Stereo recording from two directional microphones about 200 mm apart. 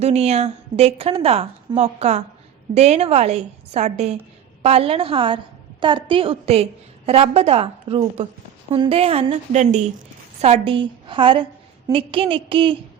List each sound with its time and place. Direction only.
0.0 s a woman's voice: 30° right (ahead or behind)